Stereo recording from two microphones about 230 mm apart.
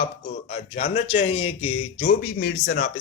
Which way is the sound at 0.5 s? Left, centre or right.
Left.